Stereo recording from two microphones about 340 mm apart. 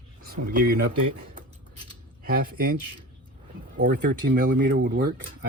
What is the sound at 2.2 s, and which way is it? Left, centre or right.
Speech, right.